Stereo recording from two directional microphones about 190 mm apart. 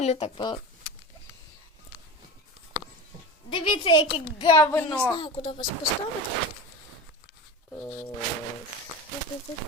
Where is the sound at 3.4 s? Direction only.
25° left (ahead or behind).